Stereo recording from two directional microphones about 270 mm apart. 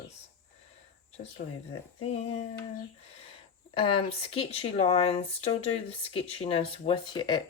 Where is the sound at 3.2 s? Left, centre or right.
Centre.